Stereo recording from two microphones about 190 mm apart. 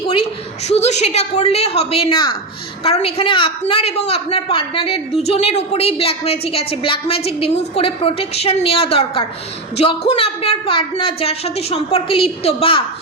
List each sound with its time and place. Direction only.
0.7 s a woman's voice: 35° left (ahead or behind)